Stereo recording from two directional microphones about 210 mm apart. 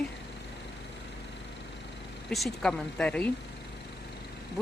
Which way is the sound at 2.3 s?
Centre (ahead or behind).